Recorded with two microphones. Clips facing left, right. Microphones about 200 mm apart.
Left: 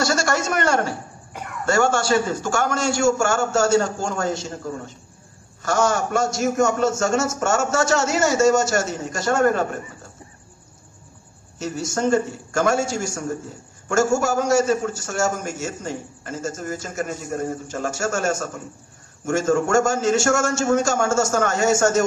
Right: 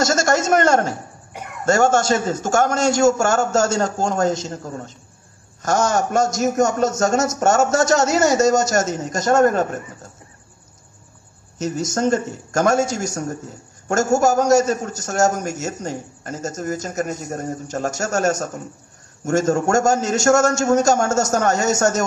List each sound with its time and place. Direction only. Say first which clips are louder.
0.0 s a man's voice: right 3 dB; 45° right (ahead or behind)
11.5 s a man's voice: right 3 dB; 40° right (ahead or behind)